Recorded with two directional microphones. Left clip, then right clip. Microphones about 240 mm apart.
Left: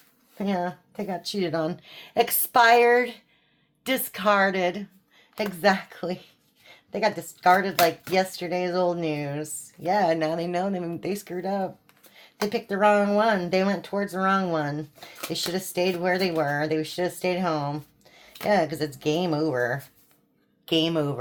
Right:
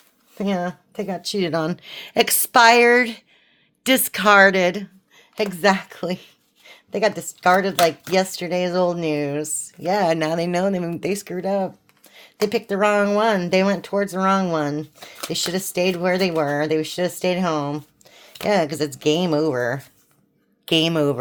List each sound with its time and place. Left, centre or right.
0.3 s a woman's voice: right